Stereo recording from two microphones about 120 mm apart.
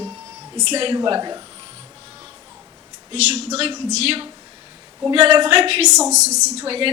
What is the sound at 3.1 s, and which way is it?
A woman's voice, 60° right (ahead or behind).